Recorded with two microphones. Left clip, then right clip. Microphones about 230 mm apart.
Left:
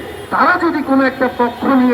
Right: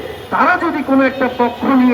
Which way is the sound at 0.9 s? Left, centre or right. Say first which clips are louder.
Right 2 dB; right.